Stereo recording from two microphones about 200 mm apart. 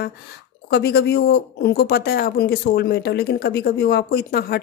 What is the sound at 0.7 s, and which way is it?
Speech, 55° left (ahead or behind).